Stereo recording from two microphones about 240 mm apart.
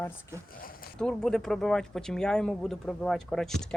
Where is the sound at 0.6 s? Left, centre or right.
Left.